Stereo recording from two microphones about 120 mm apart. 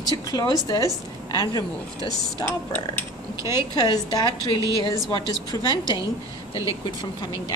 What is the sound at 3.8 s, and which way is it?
A woman's voice, 35° left (ahead or behind).